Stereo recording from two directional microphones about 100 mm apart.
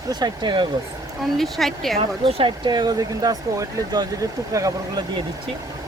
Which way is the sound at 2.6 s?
45° right (ahead or behind).